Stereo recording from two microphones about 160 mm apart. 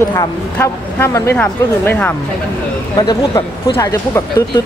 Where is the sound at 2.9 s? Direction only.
30° left (ahead or behind).